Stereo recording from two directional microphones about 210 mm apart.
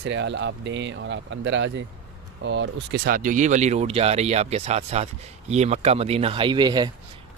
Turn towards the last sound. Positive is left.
turn(degrees=-20)  # may be behind; listen again after turning